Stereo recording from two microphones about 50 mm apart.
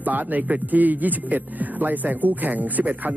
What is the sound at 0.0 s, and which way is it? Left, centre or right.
Speech, right.